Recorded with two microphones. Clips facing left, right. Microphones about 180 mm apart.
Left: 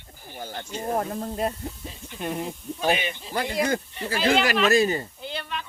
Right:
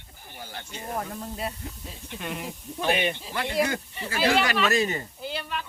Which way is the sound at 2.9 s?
60° right (ahead or behind).